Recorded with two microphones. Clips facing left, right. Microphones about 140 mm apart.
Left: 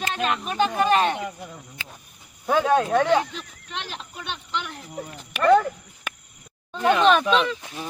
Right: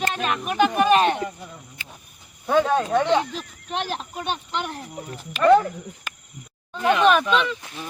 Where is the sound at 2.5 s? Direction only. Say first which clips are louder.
Even; 5° left (ahead or behind).